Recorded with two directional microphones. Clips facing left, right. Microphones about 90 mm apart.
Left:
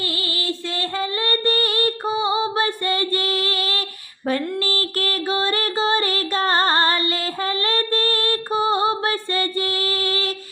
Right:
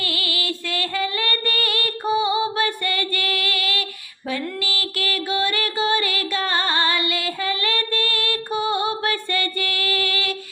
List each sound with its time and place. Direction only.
0.0 s female singing: 30° left (ahead or behind)
4.3 s music: 40° left (ahead or behind)